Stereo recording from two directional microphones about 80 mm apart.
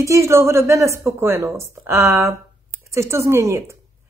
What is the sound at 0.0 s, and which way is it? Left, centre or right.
Speech, right.